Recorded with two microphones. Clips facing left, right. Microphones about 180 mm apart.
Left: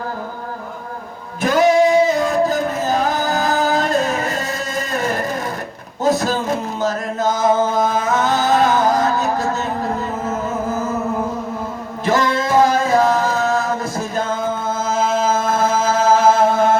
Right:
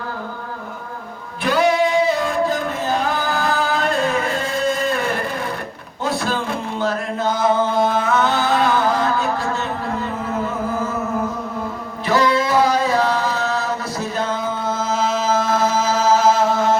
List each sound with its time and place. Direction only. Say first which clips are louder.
1.4 s singing: left 3 dB; 45° left (ahead or behind)
6.0 s chant: left 5 dB; 45° left (ahead or behind)
12.0 s singing: even; 45° left (ahead or behind)
14.8 s chant: left 3 dB; 50° left (ahead or behind)